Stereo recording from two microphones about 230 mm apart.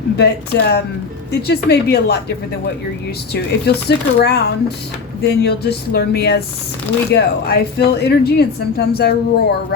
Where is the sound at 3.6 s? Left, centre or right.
Left.